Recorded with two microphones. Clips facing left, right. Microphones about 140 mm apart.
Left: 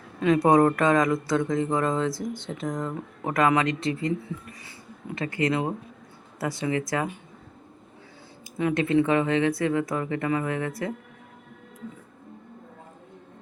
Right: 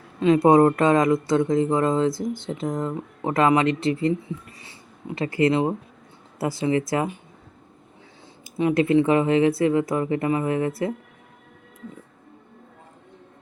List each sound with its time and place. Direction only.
0.2 s speech: 25° right (ahead or behind)
8.5 s speech: 25° right (ahead or behind)